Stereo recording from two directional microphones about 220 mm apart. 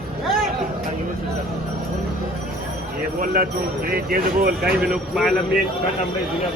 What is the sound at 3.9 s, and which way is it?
Speech, 45° right (ahead or behind).